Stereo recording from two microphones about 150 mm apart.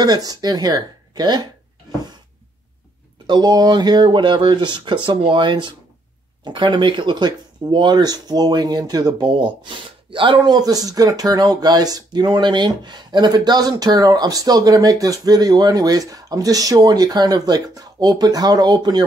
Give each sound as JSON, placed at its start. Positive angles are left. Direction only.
{"t": 0.0, "sound": "speech", "side_deg": -25}
{"t": 3.3, "sound": "speech", "side_deg": -25}